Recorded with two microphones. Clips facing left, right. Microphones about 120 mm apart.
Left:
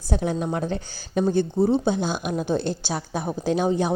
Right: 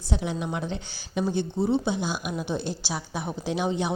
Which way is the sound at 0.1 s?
45° left (ahead or behind).